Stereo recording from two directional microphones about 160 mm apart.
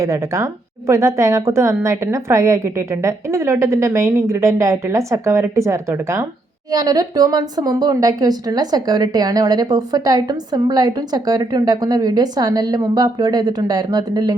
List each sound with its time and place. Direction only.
0.0 s a woman's voice: 20° right (ahead or behind)